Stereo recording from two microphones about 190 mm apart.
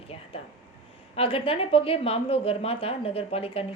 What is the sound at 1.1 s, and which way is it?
A woman's voice, 30° left (ahead or behind).